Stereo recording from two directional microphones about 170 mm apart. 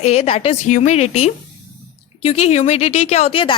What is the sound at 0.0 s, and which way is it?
A woman's voice, 40° left (ahead or behind).